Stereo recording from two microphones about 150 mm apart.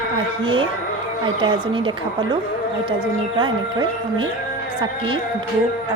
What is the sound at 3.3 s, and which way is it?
Speech, 30° right (ahead or behind).